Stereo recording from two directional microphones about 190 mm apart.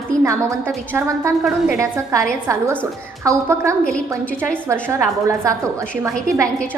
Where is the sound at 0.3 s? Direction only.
15° right (ahead or behind).